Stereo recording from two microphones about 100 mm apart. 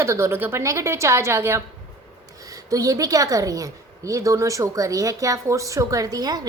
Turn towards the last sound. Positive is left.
turn(degrees=-40)  # may be behind; listen again after turning